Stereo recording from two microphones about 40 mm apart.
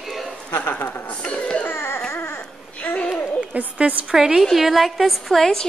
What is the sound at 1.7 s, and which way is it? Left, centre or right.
Music, left.